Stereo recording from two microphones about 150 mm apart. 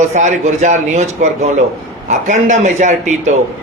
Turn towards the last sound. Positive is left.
turn(degrees=-55)  # may be behind; listen again after turning